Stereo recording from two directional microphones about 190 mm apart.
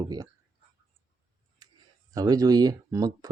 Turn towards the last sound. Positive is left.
turn(degrees=-20)  # may be behind; listen again after turning